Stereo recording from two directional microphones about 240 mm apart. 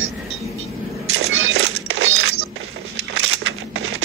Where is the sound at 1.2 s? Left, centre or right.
Right.